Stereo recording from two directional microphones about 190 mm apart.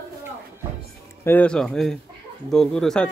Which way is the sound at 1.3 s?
5° left (ahead or behind).